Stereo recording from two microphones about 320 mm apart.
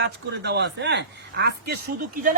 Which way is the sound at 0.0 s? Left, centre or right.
Right.